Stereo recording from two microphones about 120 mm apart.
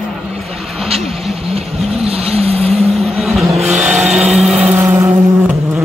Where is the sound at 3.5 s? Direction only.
75° right (ahead or behind).